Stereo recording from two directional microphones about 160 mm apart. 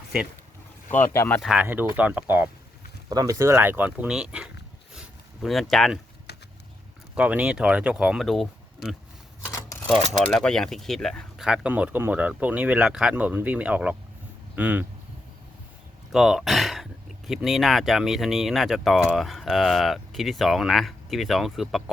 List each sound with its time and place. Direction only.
1.0 s speech: 15° left (ahead or behind)
1.4 s speech: centre (ahead or behind)
3.1 s speech: 20° right (ahead or behind); by 4.4 s 5° right (ahead or behind)
4.9 s a sound: centre (ahead or behind)
7.2 s speech: 5° right (ahead or behind)
9.5 s shuffling cards: 20° left (ahead or behind)
10.1 s speech: 5° left (ahead or behind)
16.1 s speech: 5° right (ahead or behind)